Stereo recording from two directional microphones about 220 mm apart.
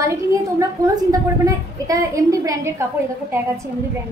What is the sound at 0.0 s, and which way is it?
A woman's voice, 15° right (ahead or behind).